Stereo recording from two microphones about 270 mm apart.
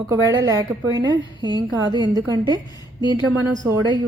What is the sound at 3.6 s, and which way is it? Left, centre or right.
Speech, centre.